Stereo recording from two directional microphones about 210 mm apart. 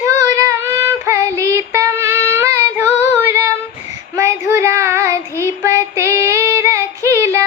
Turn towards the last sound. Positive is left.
turn(degrees=-10)  # may be behind; listen again after turning